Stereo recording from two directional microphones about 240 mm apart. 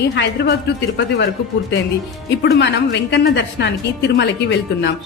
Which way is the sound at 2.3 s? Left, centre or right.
Left.